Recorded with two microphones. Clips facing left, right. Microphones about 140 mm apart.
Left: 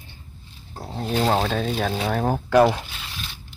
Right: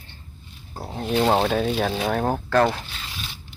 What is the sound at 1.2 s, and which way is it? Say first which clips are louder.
Speech: right 2 dB; 5° right (ahead or behind).